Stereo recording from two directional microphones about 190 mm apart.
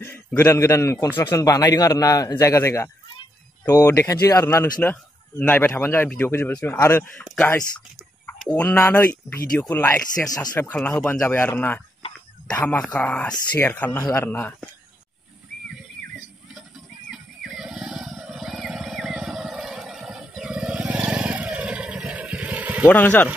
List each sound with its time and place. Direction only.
0.0 s a man's voice: 10° left (ahead or behind)
3.2 s a sound: 15° left (ahead or behind)
4.1 s a man's voice: 20° left (ahead or behind)
8.3 s a man's voice: 10° left (ahead or behind)
17.1 s vehicle: centre (ahead or behind)
22.8 s a man's voice: 10° left (ahead or behind)